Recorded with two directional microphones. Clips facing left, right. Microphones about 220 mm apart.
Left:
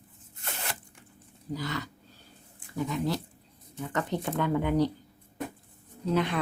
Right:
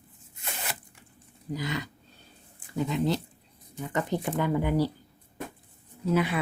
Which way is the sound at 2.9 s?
25° right (ahead or behind).